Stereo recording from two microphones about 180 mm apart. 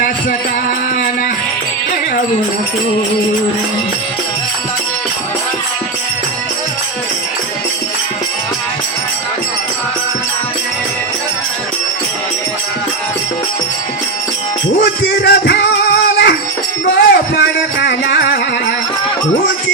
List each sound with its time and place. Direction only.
15.2 s music: 65° left (ahead or behind)